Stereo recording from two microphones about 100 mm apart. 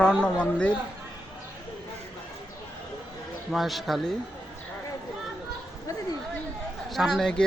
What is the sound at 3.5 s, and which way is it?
Speech, centre (ahead or behind).